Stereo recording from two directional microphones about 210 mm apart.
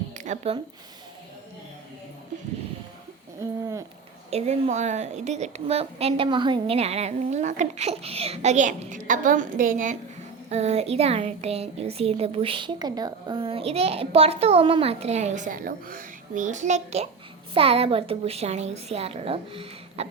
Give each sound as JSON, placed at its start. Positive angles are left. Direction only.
{"t": 0.2, "sound": "speech", "side_deg": -30}
{"t": 4.3, "sound": "a woman's voice", "side_deg": -30}